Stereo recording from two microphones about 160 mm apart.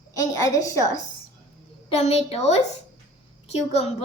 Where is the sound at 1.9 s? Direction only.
40° left (ahead or behind).